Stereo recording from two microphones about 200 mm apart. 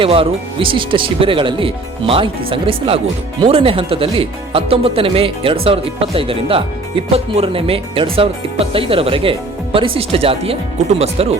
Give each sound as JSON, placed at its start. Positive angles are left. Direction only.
{"t": 0.0, "sound": "speech", "side_deg": -30}